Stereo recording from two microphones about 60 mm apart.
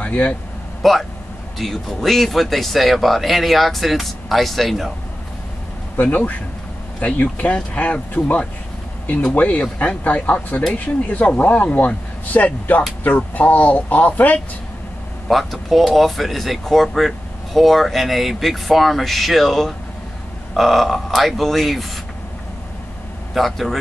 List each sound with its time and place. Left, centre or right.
0.0 s vehicle: left
0.8 s speech: centre
5.9 s speech: left
15.2 s speech: centre
23.3 s speech: centre